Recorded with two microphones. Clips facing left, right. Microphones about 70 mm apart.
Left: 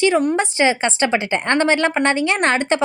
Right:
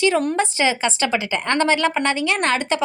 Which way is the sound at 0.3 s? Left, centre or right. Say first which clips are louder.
Left 2 dB; left.